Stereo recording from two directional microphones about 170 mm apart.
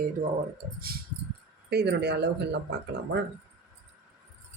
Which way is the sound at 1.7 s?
75° right (ahead or behind).